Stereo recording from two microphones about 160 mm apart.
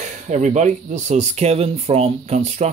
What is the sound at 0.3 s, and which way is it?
Speech, 45° right (ahead or behind).